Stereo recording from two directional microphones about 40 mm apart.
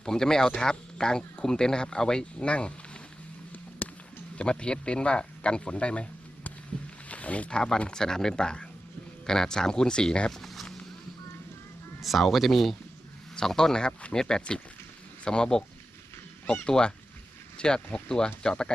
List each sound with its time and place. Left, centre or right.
0.0 s speech: centre
2.4 s speech: left
3.8 s a sound: left
4.4 s speech: left
7.1 s a sound: left
7.5 s speech: centre
10.3 s a sound: centre
12.0 s speech: centre
13.3 s speech: centre